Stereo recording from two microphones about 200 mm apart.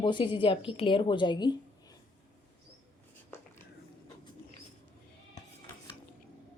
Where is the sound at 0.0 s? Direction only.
25° left (ahead or behind).